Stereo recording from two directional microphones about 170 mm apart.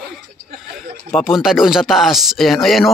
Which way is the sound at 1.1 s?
Centre (ahead or behind).